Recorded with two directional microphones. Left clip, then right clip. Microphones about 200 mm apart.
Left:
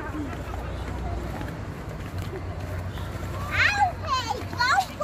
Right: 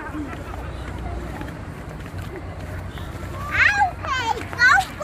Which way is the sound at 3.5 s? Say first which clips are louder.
Right 4 dB; 50° left (ahead or behind).